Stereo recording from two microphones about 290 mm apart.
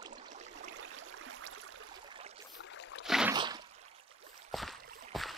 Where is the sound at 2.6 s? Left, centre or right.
Left.